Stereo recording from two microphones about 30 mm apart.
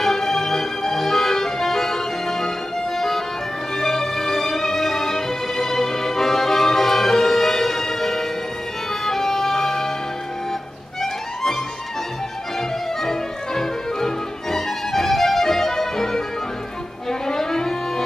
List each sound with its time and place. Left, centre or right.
0.0 s music: centre
3.7 s music: centre
13.0 s music: centre